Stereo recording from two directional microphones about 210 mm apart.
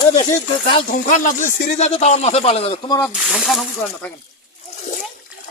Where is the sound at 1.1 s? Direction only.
40° left (ahead or behind).